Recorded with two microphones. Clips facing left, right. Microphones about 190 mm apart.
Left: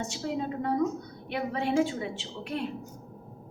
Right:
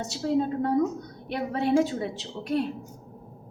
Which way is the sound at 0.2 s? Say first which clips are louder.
Right 6 dB; 45° right (ahead or behind).